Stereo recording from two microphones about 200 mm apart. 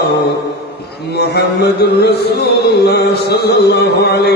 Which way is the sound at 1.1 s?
55° left (ahead or behind).